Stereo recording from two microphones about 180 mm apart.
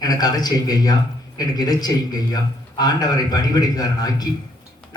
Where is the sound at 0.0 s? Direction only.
20° left (ahead or behind).